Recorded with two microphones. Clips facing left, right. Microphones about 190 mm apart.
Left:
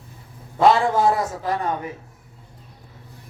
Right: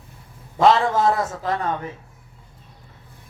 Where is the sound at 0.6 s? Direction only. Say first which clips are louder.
Even; 10° left (ahead or behind).